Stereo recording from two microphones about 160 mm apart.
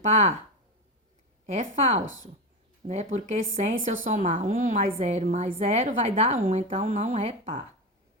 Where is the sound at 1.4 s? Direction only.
45° right (ahead or behind).